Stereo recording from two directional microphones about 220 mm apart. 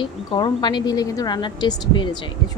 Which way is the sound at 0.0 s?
20° left (ahead or behind).